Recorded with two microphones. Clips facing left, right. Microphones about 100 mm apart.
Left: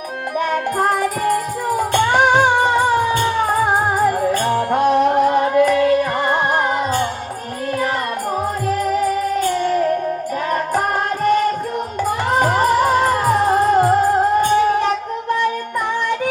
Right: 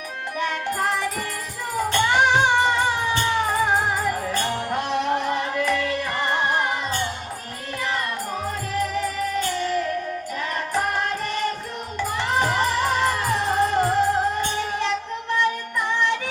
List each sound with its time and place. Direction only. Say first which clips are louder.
0.3 s music: left 7 dB; 45° left (ahead or behind)
9.5 s music: left 7 dB; 45° left (ahead or behind)